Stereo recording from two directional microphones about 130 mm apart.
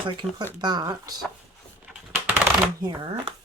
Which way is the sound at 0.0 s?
40° right (ahead or behind).